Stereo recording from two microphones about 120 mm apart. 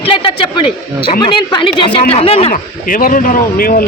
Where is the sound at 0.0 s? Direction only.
50° left (ahead or behind).